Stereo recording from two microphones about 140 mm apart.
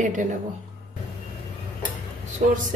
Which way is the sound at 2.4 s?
55° right (ahead or behind).